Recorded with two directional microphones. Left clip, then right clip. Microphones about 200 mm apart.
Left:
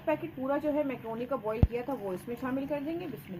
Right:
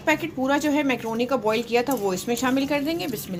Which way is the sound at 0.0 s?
60° right (ahead or behind).